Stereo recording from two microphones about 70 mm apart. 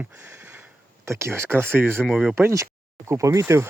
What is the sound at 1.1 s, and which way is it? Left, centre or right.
Speech, right.